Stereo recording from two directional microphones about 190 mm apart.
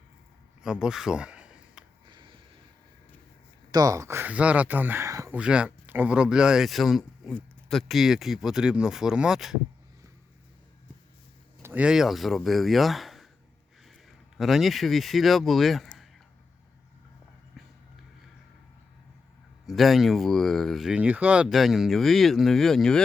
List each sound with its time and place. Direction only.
0.6 s a sound: 5° right (ahead or behind)
2.0 s a sound: 25° right (ahead or behind)
3.7 s speech: 20° right (ahead or behind); by 9.6 s centre (ahead or behind)
11.6 s speech: 10° right (ahead or behind)
14.3 s speech: centre (ahead or behind)
19.6 s speech: centre (ahead or behind)